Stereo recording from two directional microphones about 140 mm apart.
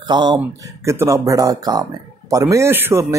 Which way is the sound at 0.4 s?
20° right (ahead or behind).